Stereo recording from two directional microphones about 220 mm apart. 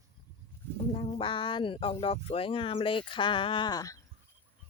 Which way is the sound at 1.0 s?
25° left (ahead or behind).